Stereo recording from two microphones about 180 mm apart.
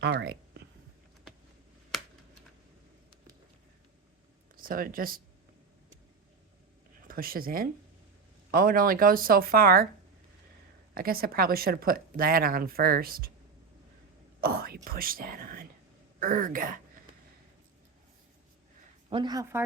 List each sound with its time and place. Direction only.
0.0 s speech: 70° right (ahead or behind)
4.5 s speech: 50° right (ahead or behind)
7.1 s speech: 55° right (ahead or behind)
10.9 s speech: 55° right (ahead or behind)
14.4 s whispering: 55° right (ahead or behind)
14.8 s speech: 55° right (ahead or behind)
19.1 s speech: 25° right (ahead or behind)